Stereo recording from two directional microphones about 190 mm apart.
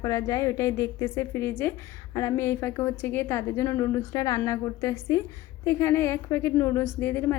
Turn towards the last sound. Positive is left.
turn(degrees=10)  # may be behind; listen again after turning